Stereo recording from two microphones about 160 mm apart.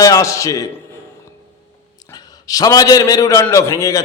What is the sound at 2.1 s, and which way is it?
A man's voice, 25° left (ahead or behind).